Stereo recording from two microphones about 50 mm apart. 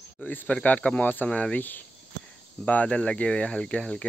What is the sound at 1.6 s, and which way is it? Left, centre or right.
Speech, left.